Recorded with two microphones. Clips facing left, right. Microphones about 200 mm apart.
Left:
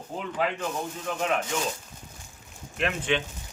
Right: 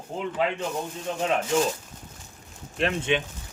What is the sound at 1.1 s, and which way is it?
Speech, 25° right (ahead or behind).